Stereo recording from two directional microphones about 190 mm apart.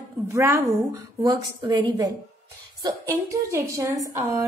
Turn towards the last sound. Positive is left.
turn(degrees=-15)  # may be behind; listen again after turning